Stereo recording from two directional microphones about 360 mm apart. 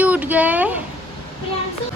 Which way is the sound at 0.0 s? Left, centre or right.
Centre.